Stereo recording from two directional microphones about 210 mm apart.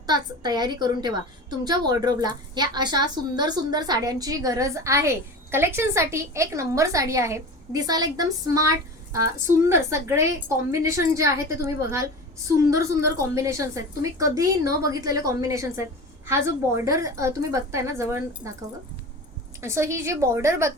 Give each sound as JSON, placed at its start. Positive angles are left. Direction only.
{"t": 0.0, "sound": "a woman's voice", "side_deg": -20}
{"t": 9.6, "sound": "a woman's voice", "side_deg": -10}
{"t": 19.6, "sound": "a woman's voice", "side_deg": -15}